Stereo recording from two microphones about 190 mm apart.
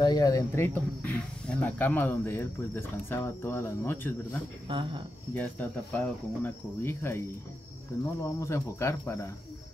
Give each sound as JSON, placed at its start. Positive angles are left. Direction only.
{"t": 0.0, "sound": "speech", "side_deg": 20}
{"t": 4.6, "sound": "speech", "side_deg": -25}
{"t": 5.3, "sound": "speech", "side_deg": 10}